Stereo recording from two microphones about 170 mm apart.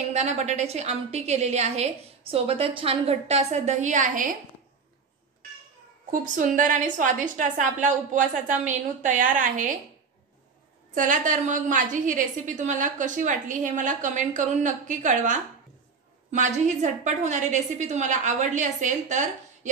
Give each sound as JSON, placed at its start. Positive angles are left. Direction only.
{"t": 0.1, "sound": "a woman's voice", "side_deg": -40}
{"t": 6.2, "sound": "a woman's voice", "side_deg": -50}
{"t": 11.0, "sound": "a woman's voice", "side_deg": -50}